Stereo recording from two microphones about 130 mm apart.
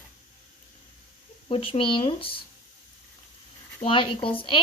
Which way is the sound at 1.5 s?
45° left (ahead or behind).